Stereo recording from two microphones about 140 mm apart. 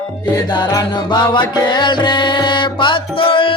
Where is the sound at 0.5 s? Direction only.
30° left (ahead or behind).